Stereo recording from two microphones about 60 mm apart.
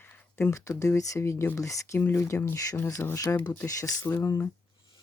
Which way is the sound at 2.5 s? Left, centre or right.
Left.